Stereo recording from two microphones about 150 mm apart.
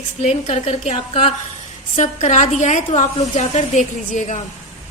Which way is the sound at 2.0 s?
55° left (ahead or behind).